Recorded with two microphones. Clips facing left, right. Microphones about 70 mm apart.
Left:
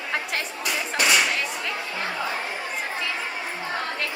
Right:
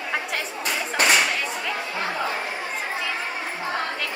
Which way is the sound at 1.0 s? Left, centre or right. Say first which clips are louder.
Right 2 dB; right.